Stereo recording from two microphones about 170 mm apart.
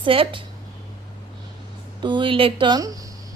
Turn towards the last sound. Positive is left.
turn(degrees=-20)  # may be behind; listen again after turning